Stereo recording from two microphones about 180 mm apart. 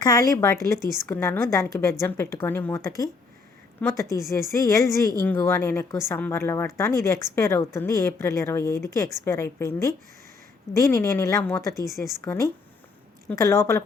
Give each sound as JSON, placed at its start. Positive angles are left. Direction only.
{"t": 0.0, "sound": "a woman's voice", "side_deg": 20}